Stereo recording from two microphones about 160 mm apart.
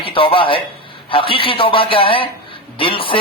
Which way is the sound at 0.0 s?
35° left (ahead or behind).